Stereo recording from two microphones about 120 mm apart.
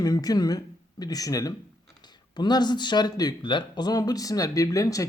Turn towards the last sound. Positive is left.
turn(degrees=30)  # may be behind; listen again after turning